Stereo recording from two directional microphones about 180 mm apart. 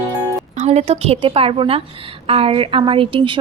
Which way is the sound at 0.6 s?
35° right (ahead or behind).